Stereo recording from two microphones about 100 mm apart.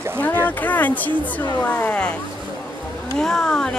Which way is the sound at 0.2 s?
15° left (ahead or behind).